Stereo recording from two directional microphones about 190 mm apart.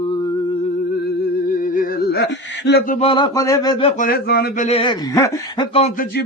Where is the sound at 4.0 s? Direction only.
55° left (ahead or behind).